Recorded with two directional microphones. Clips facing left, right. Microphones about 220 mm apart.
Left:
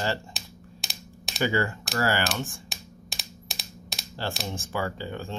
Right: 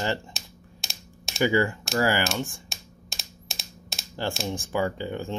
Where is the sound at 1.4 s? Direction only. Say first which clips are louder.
Right 3 dB; 15° right (ahead or behind).